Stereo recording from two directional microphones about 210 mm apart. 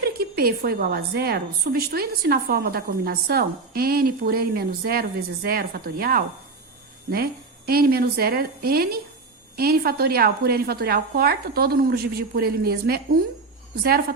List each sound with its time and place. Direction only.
0.0 s a woman's voice: 45° right (ahead or behind)